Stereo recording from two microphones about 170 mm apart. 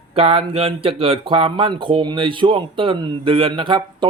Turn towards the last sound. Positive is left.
turn(degrees=-30)  # may be behind; listen again after turning